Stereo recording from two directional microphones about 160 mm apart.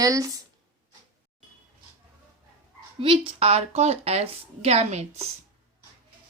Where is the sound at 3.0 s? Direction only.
35° right (ahead or behind).